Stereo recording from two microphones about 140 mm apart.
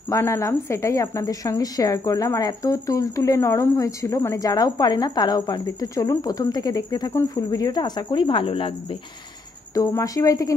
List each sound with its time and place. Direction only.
0.1 s a woman's voice: 20° left (ahead or behind); by 8.7 s 40° left (ahead or behind)
9.8 s a woman's voice: 25° left (ahead or behind)